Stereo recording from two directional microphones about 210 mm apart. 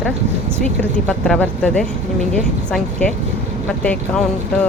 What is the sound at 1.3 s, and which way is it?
Speech, 5° left (ahead or behind).